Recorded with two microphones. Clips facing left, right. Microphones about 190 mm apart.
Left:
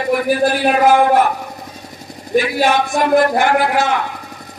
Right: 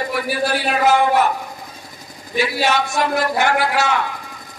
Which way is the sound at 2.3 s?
50° left (ahead or behind).